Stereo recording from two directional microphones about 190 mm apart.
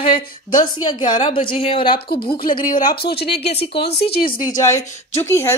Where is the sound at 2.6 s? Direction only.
45° left (ahead or behind).